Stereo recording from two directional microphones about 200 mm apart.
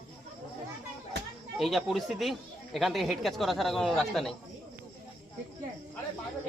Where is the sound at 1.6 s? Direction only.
Centre (ahead or behind).